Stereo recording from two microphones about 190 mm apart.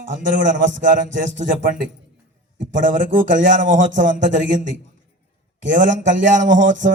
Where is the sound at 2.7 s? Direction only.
45° right (ahead or behind).